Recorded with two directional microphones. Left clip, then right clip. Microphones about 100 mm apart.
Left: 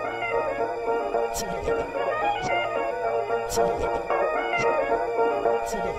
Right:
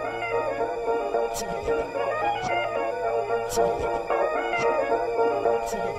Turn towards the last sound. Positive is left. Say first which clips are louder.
# even
turn(degrees=0)  # may be behind; listen again after turning